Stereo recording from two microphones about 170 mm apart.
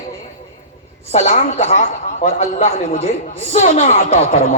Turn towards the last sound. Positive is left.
turn(degrees=40)  # may be behind; listen again after turning